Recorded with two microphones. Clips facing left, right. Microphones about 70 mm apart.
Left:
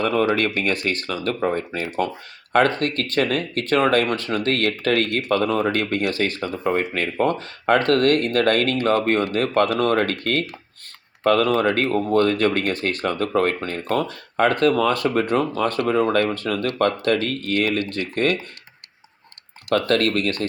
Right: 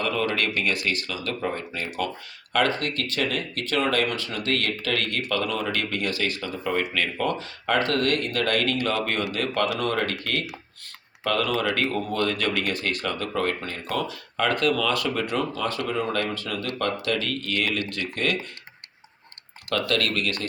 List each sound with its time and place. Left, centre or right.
0.3 s speech: left
19.7 s speech: left